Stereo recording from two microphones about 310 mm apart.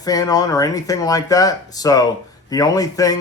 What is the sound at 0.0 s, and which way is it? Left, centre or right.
Speech, centre.